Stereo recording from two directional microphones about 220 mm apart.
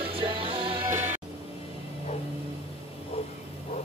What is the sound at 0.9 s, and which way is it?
Music, 10° right (ahead or behind).